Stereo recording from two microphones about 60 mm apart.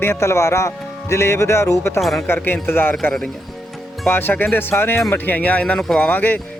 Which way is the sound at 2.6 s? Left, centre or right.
Left.